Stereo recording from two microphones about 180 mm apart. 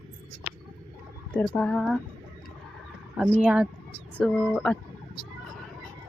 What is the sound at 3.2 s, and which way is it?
Speech, 5° right (ahead or behind).